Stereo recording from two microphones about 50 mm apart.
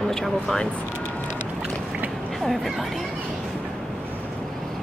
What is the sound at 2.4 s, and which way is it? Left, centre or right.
Speech, centre.